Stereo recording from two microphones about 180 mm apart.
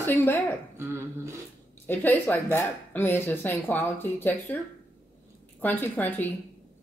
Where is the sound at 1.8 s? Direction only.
10° left (ahead or behind).